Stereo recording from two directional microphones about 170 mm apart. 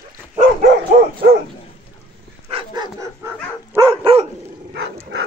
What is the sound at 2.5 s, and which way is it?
Dog, 35° right (ahead or behind).